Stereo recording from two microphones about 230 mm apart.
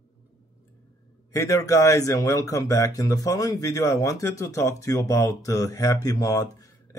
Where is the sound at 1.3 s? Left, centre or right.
Centre.